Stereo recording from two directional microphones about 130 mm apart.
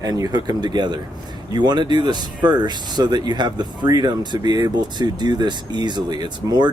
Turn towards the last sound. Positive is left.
turn(degrees=-35)  # may be behind; listen again after turning